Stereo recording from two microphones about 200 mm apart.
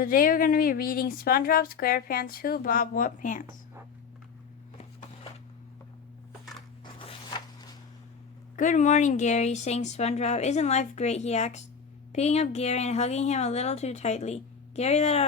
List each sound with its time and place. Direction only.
0.0 s a woman's voice: 45° left (ahead or behind)
6.8 s zipper: 20° left (ahead or behind)
8.5 s speech: 40° left (ahead or behind)